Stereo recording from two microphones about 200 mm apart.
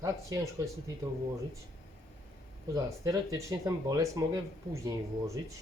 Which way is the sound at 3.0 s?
15° right (ahead or behind).